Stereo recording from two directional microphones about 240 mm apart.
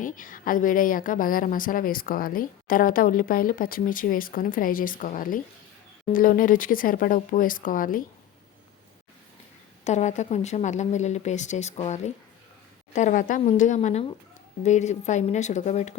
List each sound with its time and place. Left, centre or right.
0.0 s a woman's voice: left
9.8 s speech: left